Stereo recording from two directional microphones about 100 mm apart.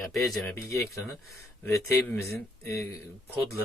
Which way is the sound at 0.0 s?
Centre (ahead or behind).